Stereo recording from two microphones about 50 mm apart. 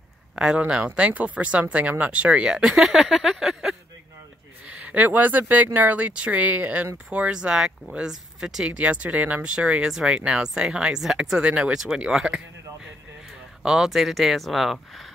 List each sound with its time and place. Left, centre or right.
0.4 s speech: centre
0.8 s speech: right
2.4 s speech: centre
4.6 s speech: right
7.1 s speech: right
8.6 s speech: right
9.8 s speech: centre
11.4 s speech: right
11.7 s speech: centre
13.6 s speech: centre